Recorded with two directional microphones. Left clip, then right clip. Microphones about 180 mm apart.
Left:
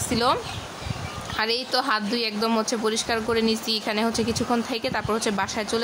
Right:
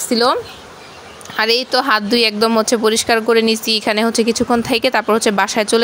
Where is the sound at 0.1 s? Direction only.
35° right (ahead or behind).